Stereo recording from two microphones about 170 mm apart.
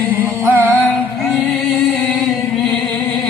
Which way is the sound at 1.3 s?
Centre (ahead or behind).